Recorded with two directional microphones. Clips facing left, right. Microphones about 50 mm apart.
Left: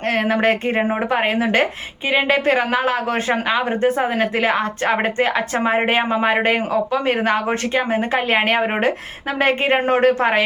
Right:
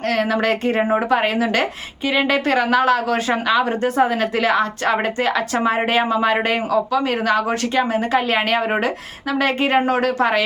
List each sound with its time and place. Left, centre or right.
0.1 s speech: left